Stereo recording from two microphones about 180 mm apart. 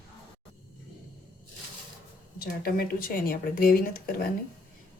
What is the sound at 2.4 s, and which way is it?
Speech, 55° left (ahead or behind).